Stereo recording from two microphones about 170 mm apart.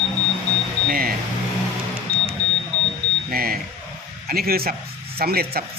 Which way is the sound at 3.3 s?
60° right (ahead or behind).